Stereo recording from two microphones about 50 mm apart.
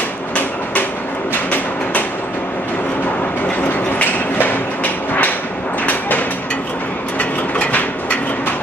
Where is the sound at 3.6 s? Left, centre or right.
Left.